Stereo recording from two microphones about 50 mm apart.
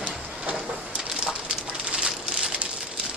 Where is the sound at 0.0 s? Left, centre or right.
Right.